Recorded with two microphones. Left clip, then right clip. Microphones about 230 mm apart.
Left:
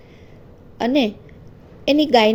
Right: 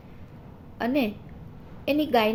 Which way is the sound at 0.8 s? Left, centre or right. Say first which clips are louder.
Left 7 dB; left.